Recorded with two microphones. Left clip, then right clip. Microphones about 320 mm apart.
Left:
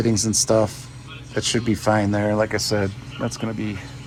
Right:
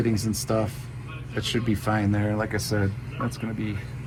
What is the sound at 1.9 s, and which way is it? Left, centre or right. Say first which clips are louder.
Speech: left 7 dB; left.